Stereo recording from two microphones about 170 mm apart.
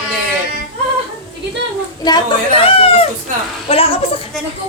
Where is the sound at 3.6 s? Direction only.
35° left (ahead or behind).